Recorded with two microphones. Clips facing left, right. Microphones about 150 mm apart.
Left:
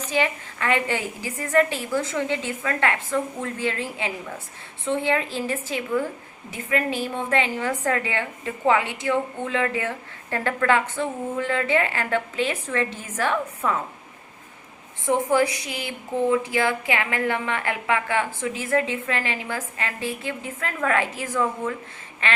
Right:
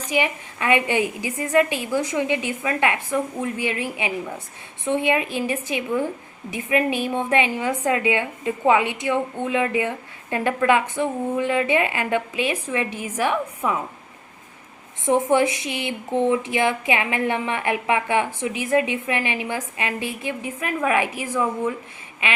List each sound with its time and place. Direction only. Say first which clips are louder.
0.0 s a woman's voice: right 1 dB; 15° right (ahead or behind)
15.0 s a woman's voice: right 2 dB; 20° right (ahead or behind)